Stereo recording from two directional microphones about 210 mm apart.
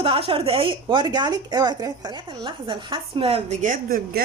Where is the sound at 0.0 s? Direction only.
25° right (ahead or behind).